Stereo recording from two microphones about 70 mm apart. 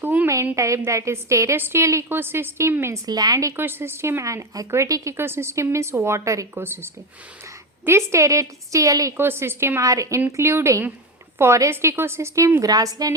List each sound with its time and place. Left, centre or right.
0.0 s a woman's voice: right
0.5 s a woman's voice: right
2.0 s a woman's voice: right
3.1 s a woman's voice: right
3.5 s a woman's voice: right
5.1 s a woman's voice: right
6.5 s a woman's voice: right
9.1 s a woman's voice: right
9.8 s a woman's voice: right
10.2 s a woman's voice: right
12.6 s a woman's voice: right